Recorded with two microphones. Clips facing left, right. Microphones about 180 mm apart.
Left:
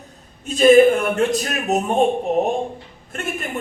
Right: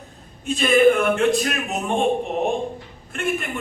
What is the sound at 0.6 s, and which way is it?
A man's voice, 40° left (ahead or behind).